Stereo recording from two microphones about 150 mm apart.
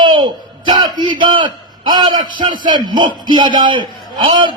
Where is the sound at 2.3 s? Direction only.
30° right (ahead or behind).